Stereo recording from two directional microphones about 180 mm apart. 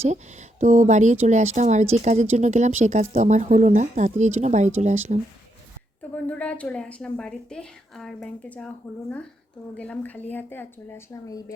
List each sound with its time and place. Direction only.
0.0 s speech: 40° right (ahead or behind)
6.0 s a woman's voice: 10° left (ahead or behind)